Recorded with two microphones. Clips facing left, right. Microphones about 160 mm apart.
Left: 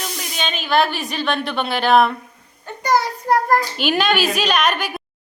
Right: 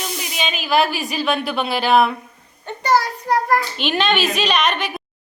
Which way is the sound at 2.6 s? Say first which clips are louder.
Right 1 dB; 10° left (ahead or behind).